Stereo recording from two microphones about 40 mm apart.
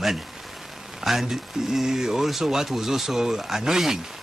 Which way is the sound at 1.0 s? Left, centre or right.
Centre.